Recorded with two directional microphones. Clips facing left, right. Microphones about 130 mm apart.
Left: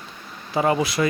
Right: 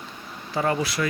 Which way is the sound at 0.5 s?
15° left (ahead or behind).